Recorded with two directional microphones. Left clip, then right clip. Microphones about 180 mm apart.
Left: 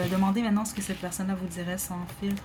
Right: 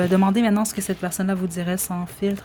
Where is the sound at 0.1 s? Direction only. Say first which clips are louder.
Right 8 dB; 45° right (ahead or behind).